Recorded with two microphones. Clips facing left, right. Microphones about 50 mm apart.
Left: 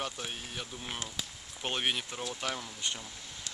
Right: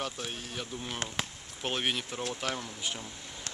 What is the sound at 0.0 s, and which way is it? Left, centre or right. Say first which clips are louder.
Speech: right 1 dB; centre.